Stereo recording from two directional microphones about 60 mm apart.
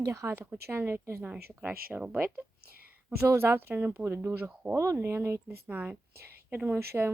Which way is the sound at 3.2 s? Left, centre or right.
Right.